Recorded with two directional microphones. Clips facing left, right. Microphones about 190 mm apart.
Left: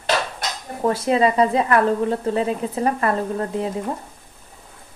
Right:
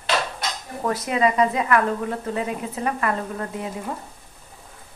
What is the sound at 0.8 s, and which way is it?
Speech, 30° left (ahead or behind).